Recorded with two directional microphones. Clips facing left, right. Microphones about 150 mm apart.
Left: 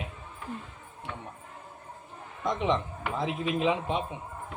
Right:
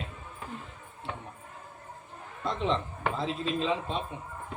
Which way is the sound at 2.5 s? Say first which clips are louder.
Left 2 dB; 15° left (ahead or behind).